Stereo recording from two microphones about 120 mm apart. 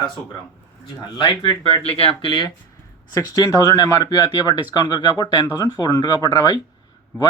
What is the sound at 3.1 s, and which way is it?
A man's voice, 30° left (ahead or behind).